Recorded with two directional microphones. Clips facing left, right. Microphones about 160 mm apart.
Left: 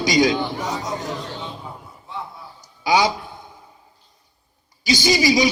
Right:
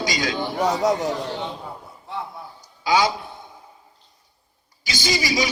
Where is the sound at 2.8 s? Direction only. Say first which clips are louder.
Left 1 dB; 25° left (ahead or behind).